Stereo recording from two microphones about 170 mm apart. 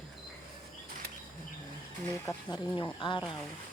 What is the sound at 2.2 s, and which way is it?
Speech, 25° left (ahead or behind).